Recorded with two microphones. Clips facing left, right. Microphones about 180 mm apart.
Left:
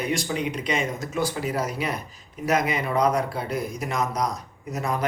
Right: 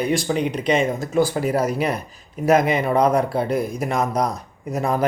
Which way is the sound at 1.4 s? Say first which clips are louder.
Right 7 dB; 50° right (ahead or behind).